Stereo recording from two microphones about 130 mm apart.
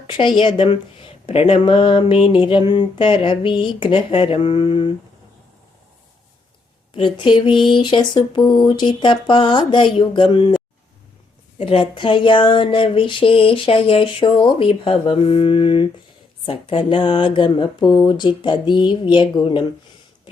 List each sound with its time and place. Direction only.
0.1 s speech: 40° left (ahead or behind)
6.9 s speech: 40° left (ahead or behind)
11.5 s speech: 45° left (ahead or behind)